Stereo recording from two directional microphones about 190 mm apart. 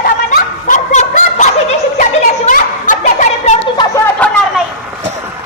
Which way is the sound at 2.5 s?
45° left (ahead or behind).